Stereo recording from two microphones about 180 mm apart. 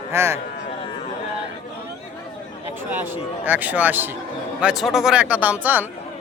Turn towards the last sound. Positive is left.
turn(degrees=-10)  # may be behind; listen again after turning